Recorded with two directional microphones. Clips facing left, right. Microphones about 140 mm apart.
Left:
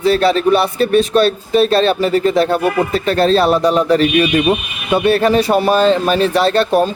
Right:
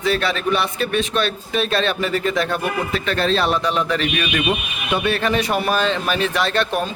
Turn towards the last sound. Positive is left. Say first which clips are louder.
# left 8 dB
turn(degrees=35)  # may be behind; listen again after turning